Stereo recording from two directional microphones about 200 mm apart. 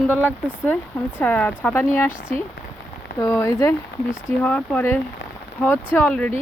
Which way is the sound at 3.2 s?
15° left (ahead or behind).